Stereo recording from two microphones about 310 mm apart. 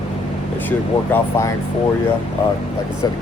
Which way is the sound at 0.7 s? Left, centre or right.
Centre.